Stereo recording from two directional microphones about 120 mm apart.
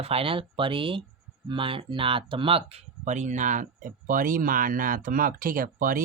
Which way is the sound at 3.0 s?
80° right.